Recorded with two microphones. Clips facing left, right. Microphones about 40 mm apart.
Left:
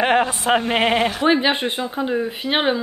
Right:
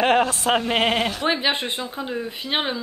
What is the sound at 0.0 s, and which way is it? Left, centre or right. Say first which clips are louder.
Speech: left 1 dB; centre.